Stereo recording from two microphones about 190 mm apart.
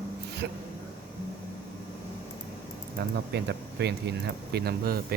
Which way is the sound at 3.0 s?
60° right (ahead or behind).